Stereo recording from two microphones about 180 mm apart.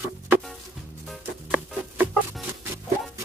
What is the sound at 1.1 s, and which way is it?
Music, 5° right (ahead or behind).